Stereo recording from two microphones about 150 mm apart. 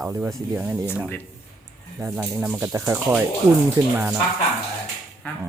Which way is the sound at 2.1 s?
5° right (ahead or behind).